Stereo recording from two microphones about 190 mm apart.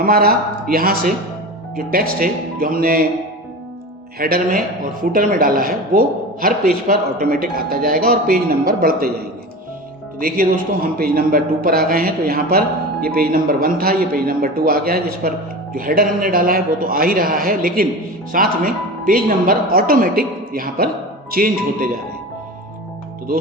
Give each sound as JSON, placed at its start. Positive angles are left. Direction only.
{"t": 0.0, "sound": "a man's voice", "side_deg": -50}
{"t": 4.2, "sound": "a man's voice", "side_deg": -50}
{"t": 10.2, "sound": "a man's voice", "side_deg": -50}